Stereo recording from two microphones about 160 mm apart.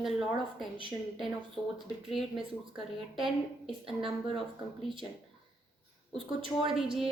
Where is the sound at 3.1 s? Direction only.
Centre (ahead or behind).